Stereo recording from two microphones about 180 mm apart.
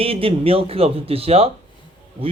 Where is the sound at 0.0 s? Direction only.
30° right (ahead or behind).